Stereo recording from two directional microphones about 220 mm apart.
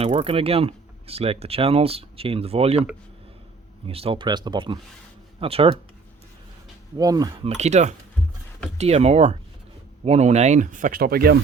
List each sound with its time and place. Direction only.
0.0 s speech: 30° right (ahead or behind)
3.8 s speech: 25° right (ahead or behind)
6.9 s speech: 15° right (ahead or behind)
7.4 s speech: 30° right (ahead or behind)